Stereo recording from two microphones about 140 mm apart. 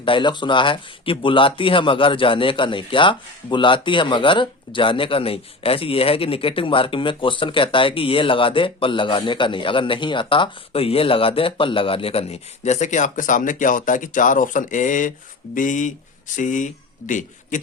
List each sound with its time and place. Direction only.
0.0 s speech: 35° left (ahead or behind); by 17.6 s 65° left (ahead or behind)